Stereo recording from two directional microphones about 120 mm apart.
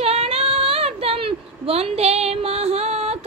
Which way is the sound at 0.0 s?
55° right (ahead or behind).